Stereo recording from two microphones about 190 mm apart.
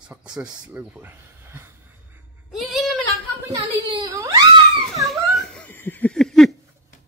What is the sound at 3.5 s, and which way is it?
Speech, 20° right (ahead or behind).